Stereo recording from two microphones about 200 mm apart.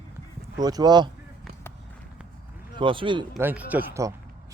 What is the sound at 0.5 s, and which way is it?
Speech, 20° right (ahead or behind).